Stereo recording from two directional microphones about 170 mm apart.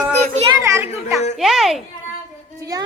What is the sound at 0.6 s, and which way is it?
Speech, 15° right (ahead or behind).